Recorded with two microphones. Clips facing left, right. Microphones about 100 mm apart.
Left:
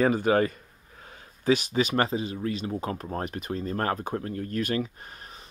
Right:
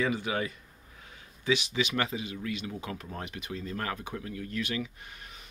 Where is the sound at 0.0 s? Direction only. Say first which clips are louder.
Left 8 dB; 45° left (ahead or behind).